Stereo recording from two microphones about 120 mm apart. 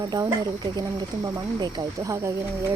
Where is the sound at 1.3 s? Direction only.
35° right (ahead or behind).